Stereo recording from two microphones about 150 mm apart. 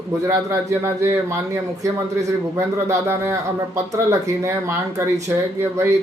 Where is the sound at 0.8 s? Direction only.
15° right (ahead or behind).